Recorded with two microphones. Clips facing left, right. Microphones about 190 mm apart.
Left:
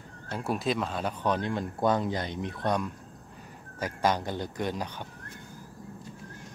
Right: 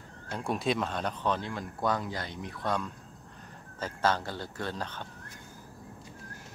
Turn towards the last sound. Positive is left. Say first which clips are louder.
# left 4 dB
turn(degrees=15)  # may be behind; listen again after turning